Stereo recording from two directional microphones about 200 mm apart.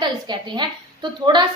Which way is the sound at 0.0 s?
20° right (ahead or behind).